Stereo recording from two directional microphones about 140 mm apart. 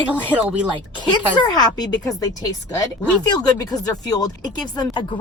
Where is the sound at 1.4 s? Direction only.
30° left (ahead or behind).